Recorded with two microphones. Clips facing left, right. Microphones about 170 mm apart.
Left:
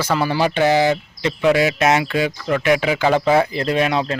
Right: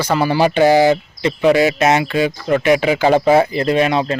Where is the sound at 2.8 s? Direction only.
35° right (ahead or behind).